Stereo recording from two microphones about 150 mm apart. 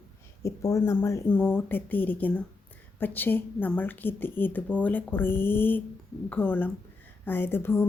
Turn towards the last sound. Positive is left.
turn(degrees=15)  # may be behind; listen again after turning